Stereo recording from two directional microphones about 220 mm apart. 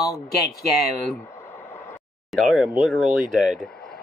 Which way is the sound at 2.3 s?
Centre (ahead or behind).